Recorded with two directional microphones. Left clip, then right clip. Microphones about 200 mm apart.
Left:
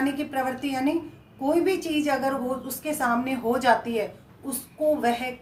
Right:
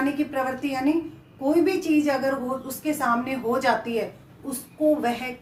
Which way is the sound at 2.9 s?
20° left (ahead or behind).